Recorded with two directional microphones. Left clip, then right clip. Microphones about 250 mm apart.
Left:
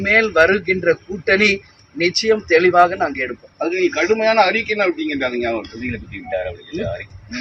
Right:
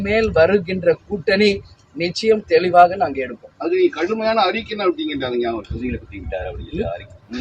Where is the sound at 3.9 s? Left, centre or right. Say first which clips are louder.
Left 4 dB; left.